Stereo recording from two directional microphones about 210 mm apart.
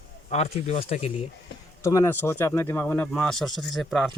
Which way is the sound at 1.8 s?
15° left (ahead or behind).